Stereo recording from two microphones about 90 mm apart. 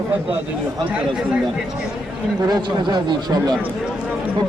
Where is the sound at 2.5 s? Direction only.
55° right (ahead or behind).